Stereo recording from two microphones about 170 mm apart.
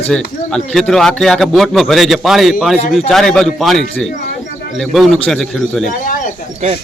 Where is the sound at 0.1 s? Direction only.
5° left (ahead or behind).